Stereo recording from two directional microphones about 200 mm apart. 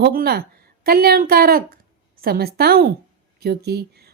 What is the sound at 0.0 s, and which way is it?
A woman's voice, 50° right (ahead or behind).